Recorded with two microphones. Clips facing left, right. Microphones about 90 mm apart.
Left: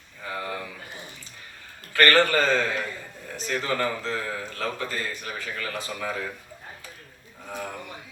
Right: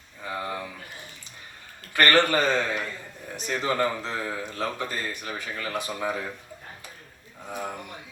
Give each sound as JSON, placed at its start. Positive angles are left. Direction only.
{"t": 0.3, "sound": "speech", "side_deg": -20}
{"t": 1.9, "sound": "a man's voice", "side_deg": -20}